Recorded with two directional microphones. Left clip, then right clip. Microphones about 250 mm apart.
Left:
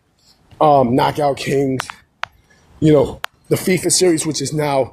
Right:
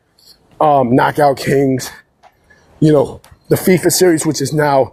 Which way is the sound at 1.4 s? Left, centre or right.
Centre.